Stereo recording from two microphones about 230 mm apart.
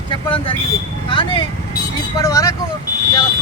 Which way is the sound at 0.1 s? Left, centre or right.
Left.